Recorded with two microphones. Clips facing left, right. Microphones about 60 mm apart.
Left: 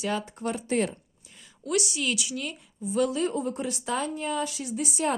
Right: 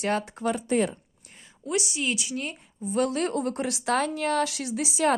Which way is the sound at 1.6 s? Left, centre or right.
Right.